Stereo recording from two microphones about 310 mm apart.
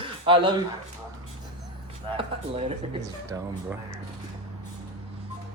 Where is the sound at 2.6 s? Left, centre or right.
Centre.